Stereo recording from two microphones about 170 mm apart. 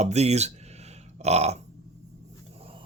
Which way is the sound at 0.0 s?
40° right (ahead or behind).